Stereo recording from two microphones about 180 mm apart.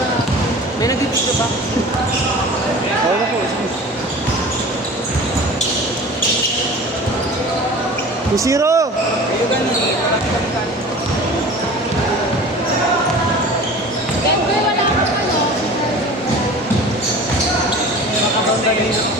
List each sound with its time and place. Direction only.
8.4 s speech: 15° right (ahead or behind)